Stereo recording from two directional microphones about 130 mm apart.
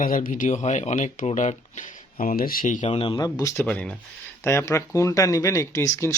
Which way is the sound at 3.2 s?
30° left (ahead or behind).